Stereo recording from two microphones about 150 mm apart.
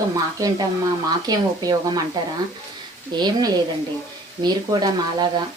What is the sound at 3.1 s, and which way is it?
Speech, 30° right (ahead or behind).